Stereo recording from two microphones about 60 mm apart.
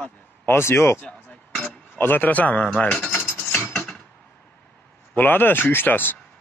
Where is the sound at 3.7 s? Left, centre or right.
Centre.